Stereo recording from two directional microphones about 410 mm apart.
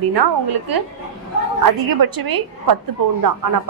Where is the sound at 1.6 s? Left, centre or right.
Right.